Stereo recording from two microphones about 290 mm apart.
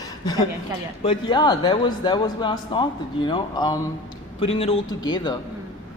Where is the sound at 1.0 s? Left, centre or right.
Centre.